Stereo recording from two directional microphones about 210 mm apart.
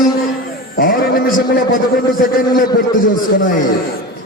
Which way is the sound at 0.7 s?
40° left (ahead or behind).